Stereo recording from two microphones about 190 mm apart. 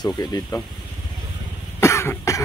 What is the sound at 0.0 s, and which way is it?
Speech, 20° left (ahead or behind).